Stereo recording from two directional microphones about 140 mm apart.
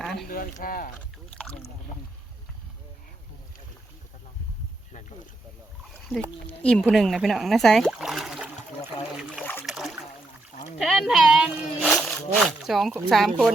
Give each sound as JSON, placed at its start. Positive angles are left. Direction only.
{"t": 0.0, "sound": "a sound", "side_deg": 0}
{"t": 0.3, "sound": "speech", "side_deg": 90}
{"t": 6.5, "sound": "speech", "side_deg": 10}
{"t": 9.4, "sound": "boat", "side_deg": 10}
{"t": 9.6, "sound": "boat", "side_deg": 0}
{"t": 10.8, "sound": "speech", "side_deg": 0}